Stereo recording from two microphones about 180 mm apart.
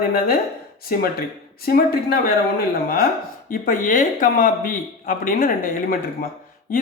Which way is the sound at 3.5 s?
50° left (ahead or behind).